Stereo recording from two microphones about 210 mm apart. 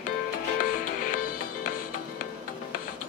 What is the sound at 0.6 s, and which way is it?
Music, 40° left (ahead or behind).